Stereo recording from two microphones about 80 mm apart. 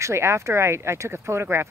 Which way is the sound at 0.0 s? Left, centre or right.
Right.